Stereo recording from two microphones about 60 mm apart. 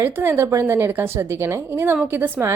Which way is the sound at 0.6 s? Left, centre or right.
Right.